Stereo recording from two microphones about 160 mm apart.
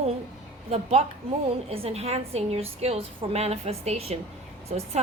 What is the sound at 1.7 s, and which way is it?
A woman's voice, 40° right (ahead or behind).